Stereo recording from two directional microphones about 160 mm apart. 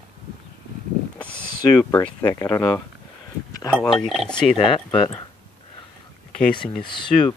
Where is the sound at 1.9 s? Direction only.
20° left (ahead or behind).